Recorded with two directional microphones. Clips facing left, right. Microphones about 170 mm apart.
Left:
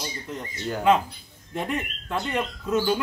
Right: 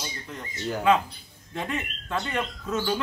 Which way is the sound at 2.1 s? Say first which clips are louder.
Left 2 dB; 10° left (ahead or behind).